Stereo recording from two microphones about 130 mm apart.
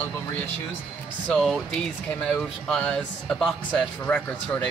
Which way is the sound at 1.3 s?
5° left (ahead or behind).